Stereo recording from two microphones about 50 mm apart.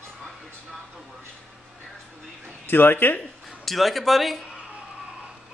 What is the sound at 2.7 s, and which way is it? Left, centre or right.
Speech, left.